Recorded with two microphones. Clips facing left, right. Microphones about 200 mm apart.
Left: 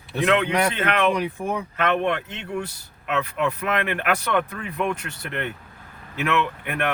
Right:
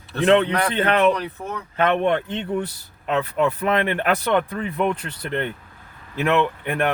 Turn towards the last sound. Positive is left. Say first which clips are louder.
# right 4 dB
turn(degrees=-30)  # may be behind; listen again after turning